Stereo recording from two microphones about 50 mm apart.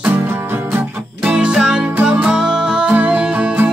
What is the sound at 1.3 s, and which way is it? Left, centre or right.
Music, centre.